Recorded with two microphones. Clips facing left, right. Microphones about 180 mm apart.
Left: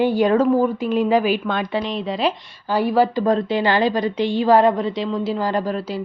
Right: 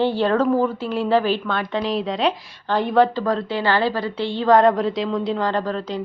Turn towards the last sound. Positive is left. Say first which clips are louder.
# left 1 dB
turn(degrees=10)  # may be behind; listen again after turning